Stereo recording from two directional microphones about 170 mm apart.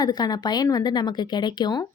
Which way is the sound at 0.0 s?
25° left (ahead or behind).